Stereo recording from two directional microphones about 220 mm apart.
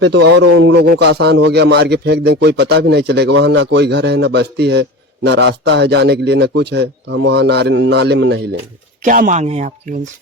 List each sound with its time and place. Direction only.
0.0 s a man's voice: 50° right (ahead or behind)
9.0 s speech: 40° right (ahead or behind)